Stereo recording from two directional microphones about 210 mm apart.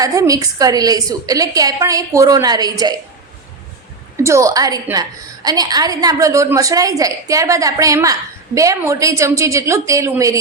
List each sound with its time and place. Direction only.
0.0 s a woman's voice: 15° right (ahead or behind)
4.2 s a woman's voice: 15° right (ahead or behind)